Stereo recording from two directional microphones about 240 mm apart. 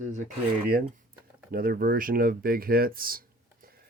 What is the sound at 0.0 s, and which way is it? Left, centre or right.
Speech, right.